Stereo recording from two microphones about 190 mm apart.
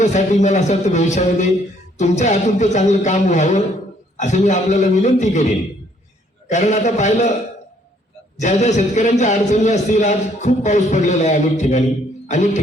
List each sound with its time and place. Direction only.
0.0 s a man's voice: 40° left (ahead or behind)
8.4 s a man's voice: 40° left (ahead or behind)